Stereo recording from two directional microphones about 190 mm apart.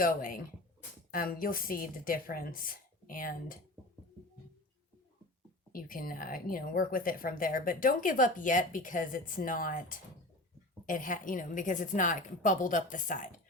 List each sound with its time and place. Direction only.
0.0 s speech: 50° left (ahead or behind)
5.7 s speech: 50° left (ahead or behind)